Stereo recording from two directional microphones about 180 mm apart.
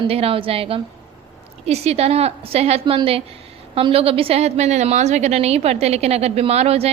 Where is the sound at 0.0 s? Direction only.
30° right (ahead or behind).